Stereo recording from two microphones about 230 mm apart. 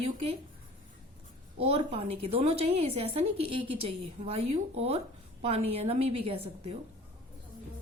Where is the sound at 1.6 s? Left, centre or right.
Right.